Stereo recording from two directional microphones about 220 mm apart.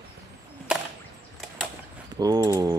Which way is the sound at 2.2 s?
15° right (ahead or behind).